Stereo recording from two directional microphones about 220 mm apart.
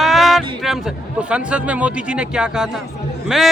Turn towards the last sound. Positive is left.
turn(degrees=0)  # may be behind; listen again after turning